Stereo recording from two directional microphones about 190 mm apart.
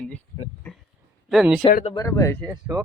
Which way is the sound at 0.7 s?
10° left (ahead or behind).